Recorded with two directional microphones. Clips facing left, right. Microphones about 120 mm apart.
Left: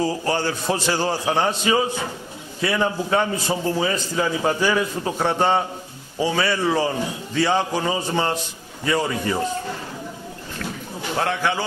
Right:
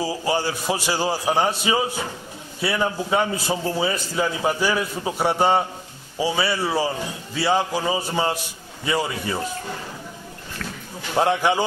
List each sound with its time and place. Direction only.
0.0 s a man's voice: 10° right (ahead or behind)
11.1 s a man's voice: 15° right (ahead or behind)